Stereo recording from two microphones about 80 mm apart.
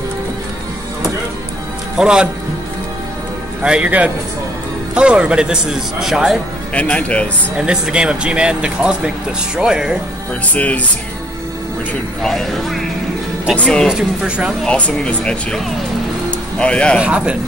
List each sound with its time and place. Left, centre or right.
2.0 s a man's voice: centre
3.6 s speech: centre
6.7 s speech: centre
7.5 s speech: centre
10.4 s speech: centre
12.2 s speech: centre
13.8 s speech: centre
14.6 s speech: centre
16.3 s music: centre
17.0 s speech: centre